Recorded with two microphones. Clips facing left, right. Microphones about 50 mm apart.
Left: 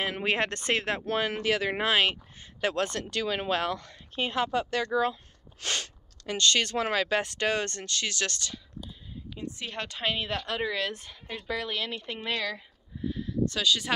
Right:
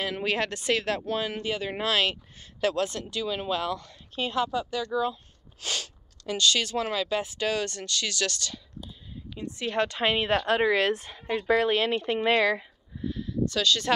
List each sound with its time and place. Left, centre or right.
0.0 s speech: left
0.5 s speech: left
0.7 s speech: left
1.0 s speech: left
1.9 s speech: left
2.7 s speech: left
4.5 s speech: left
9.8 s speech: centre
10.2 s speech: right
10.9 s speech: right
11.4 s speech: right
13.6 s speech: centre